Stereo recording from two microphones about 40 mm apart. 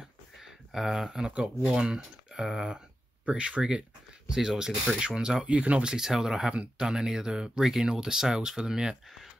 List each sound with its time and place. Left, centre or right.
0.7 s speech: centre
1.3 s speech: right
1.7 s speech: centre
3.3 s speech: right
4.3 s speech: centre
5.9 s speech: centre